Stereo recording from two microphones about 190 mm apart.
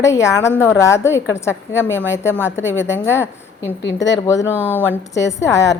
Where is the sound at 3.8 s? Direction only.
70° left (ahead or behind).